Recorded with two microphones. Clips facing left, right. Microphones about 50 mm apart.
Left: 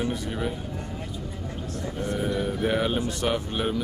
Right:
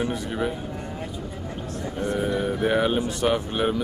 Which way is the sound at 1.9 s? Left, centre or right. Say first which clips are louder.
Right 3 dB; centre.